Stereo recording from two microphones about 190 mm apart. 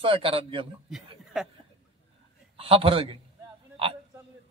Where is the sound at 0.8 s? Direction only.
Centre (ahead or behind).